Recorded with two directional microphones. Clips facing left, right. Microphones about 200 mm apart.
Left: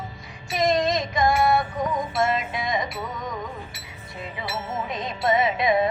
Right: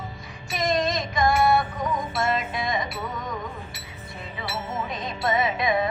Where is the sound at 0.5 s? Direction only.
20° left (ahead or behind).